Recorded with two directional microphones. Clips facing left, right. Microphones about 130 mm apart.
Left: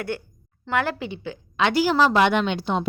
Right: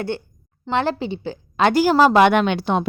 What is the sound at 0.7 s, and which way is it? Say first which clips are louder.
A woman's voice: right 4 dB; 30° right (ahead or behind).